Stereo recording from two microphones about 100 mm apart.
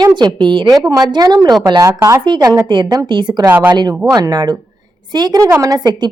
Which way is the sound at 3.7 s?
45° right (ahead or behind).